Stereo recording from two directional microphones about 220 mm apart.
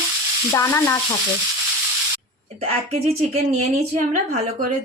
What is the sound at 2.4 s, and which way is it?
A woman's voice, 30° right (ahead or behind).